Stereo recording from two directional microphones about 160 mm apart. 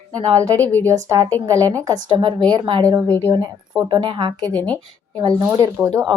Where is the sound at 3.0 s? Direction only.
10° left (ahead or behind).